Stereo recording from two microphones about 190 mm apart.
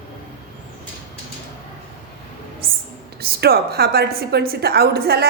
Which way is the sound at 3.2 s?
55° right (ahead or behind).